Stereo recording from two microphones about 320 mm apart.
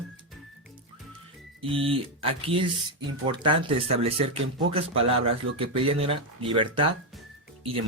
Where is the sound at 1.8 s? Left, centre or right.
Centre.